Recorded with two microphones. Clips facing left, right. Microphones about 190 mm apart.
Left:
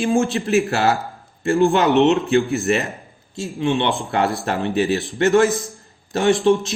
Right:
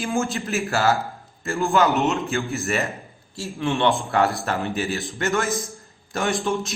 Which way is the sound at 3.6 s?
20° left (ahead or behind).